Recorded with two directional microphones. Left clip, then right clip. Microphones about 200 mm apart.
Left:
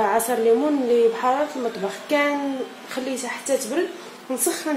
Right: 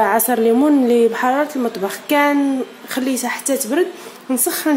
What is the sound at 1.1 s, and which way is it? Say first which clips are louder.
A woman's voice: right 4 dB; 45° right (ahead or behind).